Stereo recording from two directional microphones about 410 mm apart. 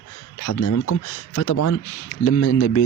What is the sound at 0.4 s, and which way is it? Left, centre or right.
Speech, left.